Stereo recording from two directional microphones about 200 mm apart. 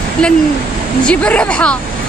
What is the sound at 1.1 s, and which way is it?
Speech, 5° left (ahead or behind).